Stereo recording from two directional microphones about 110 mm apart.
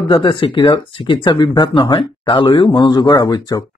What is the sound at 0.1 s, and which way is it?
A man's voice, 50° left (ahead or behind).